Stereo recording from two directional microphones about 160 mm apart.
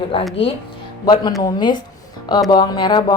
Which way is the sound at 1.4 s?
25° left (ahead or behind).